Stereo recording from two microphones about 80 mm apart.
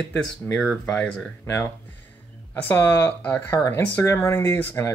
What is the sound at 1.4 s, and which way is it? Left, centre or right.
Speech, left.